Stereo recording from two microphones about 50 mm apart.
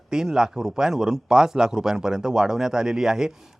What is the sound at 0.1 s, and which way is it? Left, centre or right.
Speech, centre.